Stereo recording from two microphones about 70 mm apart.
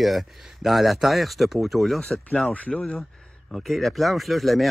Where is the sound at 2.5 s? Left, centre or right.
Centre.